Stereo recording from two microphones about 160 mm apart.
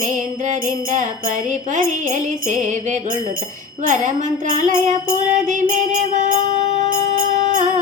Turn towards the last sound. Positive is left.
turn(degrees=-50)  # may be behind; listen again after turning